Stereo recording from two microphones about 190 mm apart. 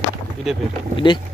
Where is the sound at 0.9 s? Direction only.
25° left (ahead or behind).